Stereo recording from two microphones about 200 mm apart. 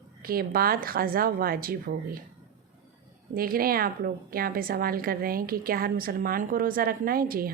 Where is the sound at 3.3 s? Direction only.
45° right (ahead or behind).